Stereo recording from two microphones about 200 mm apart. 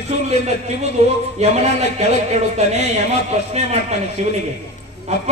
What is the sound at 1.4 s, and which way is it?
Speech, 35° right (ahead or behind).